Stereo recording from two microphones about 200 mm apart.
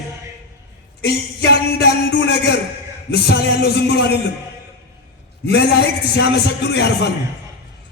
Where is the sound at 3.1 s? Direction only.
55° left (ahead or behind).